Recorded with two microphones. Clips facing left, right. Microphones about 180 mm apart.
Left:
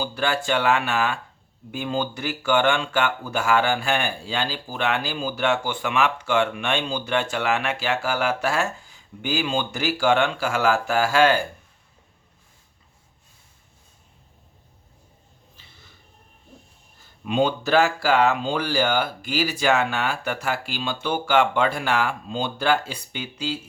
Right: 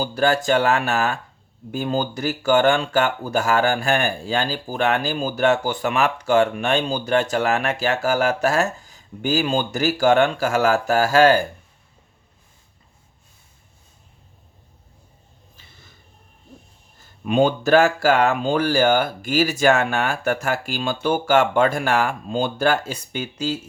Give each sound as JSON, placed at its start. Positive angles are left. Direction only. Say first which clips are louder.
{"t": 0.0, "sound": "speech", "louder": "right 5 dB", "side_deg": -40}
{"t": 17.2, "sound": "speech", "louder": "right 4 dB", "side_deg": -50}